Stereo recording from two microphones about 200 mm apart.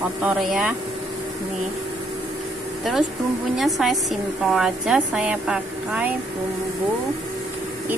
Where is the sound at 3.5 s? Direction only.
Centre (ahead or behind).